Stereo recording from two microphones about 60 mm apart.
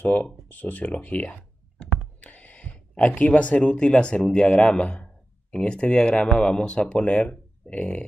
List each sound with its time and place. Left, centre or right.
0.0 s speech: left